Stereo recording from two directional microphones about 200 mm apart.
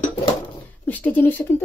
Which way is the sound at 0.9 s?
10° left (ahead or behind).